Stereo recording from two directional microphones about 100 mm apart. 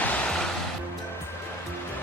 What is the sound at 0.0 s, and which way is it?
Music, 15° left (ahead or behind).